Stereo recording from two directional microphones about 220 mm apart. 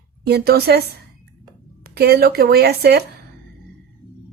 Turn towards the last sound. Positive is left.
turn(degrees=-45)  # may be behind; listen again after turning